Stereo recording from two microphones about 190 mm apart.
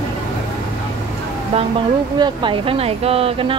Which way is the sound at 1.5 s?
30° right (ahead or behind).